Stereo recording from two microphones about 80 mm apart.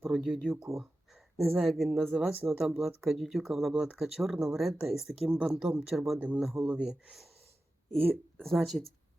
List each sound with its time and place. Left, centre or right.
0.0 s speech: centre
6.1 s speech: centre
6.4 s speech: centre
7.9 s speech: right
8.4 s speech: centre